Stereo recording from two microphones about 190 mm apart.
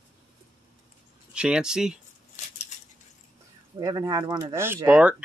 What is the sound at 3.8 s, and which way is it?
Speech, 20° right (ahead or behind).